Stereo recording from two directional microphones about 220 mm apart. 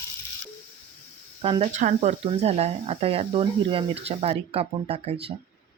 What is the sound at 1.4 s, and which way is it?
Speech, 25° right (ahead or behind).